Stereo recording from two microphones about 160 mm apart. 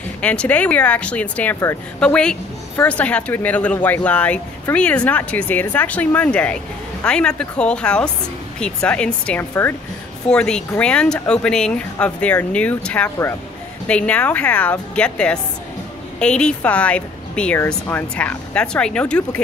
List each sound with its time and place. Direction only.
0.2 s speech: 10° left (ahead or behind)